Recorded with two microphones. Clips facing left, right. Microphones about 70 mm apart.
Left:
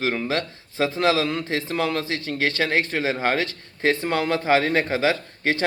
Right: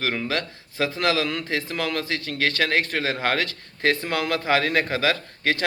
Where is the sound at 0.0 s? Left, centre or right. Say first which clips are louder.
Left 2 dB; left.